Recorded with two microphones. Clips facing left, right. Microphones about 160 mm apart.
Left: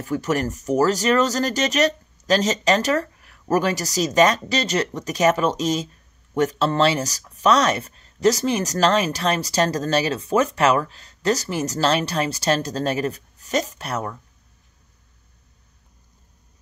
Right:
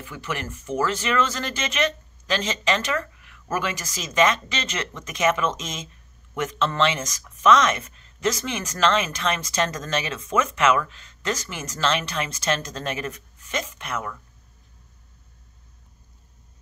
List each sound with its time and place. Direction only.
0.0 s speech: 40° left (ahead or behind)